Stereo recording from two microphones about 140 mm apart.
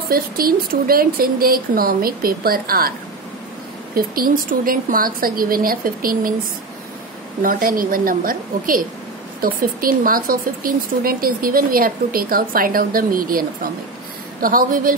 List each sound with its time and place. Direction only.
0.1 s speech: 90° right
3.9 s speech: 90° right
7.4 s speech: 90° right